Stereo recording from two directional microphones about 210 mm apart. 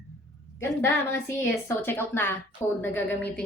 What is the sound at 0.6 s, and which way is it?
Speech, 15° left (ahead or behind).